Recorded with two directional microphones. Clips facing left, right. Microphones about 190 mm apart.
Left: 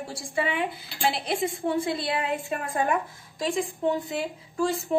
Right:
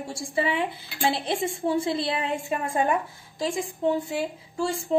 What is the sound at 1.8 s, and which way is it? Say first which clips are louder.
Speech: right 1 dB; 25° right (ahead or behind).